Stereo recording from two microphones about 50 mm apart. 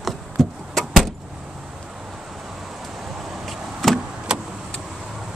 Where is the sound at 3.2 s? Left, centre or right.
Centre.